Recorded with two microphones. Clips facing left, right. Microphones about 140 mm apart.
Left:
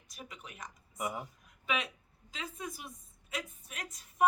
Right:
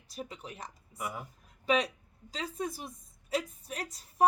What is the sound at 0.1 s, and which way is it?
Speech, 30° right (ahead or behind).